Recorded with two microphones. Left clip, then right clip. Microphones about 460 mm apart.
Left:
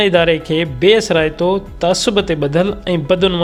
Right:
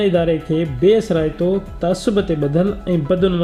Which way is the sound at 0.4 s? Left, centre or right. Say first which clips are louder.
Left 3 dB; centre.